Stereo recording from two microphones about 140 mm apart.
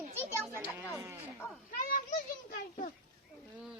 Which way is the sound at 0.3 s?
20° right (ahead or behind).